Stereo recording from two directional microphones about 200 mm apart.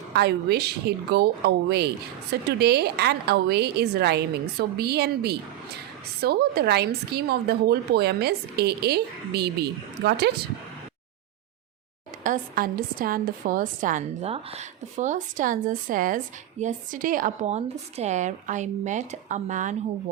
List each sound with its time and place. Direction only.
0.1 s a woman's voice: 55° right (ahead or behind)
12.2 s a woman's voice: 45° right (ahead or behind)